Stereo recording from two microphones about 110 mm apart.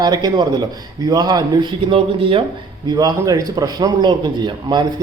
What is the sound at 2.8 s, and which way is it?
A man's voice, 40° right (ahead or behind).